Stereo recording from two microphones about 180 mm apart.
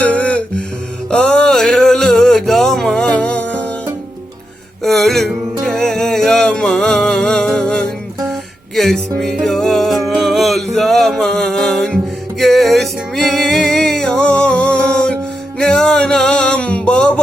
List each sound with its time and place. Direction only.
0.0 s music: 10° left (ahead or behind)
1.1 s a sound: 5° left (ahead or behind)
4.8 s music: centre (ahead or behind)